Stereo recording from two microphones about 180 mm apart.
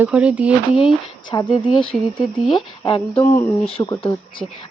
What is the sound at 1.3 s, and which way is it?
Speech, 25° left (ahead or behind).